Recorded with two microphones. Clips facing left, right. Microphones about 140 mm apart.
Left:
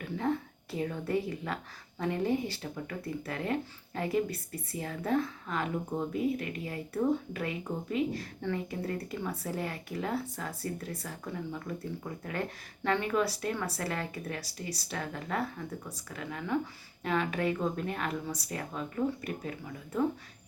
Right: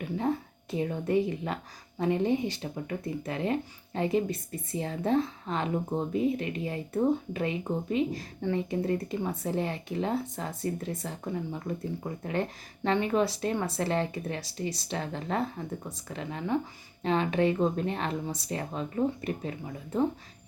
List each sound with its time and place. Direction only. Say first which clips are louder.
0.0 s speech: right 2 dB; 20° right (ahead or behind)